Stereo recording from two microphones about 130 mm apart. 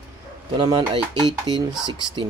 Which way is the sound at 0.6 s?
35° right (ahead or behind).